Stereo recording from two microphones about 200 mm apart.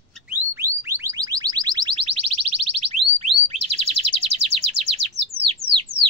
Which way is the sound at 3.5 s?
30° right (ahead or behind).